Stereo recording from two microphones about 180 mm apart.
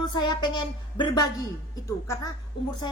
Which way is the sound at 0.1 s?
25° left (ahead or behind).